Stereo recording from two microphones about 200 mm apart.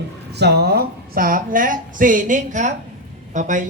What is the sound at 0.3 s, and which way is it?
A woman's voice, 55° right (ahead or behind).